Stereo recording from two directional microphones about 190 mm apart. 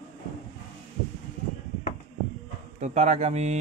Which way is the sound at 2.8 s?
40° right (ahead or behind).